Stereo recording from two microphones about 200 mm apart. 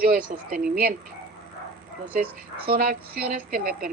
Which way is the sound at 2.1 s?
50° right (ahead or behind).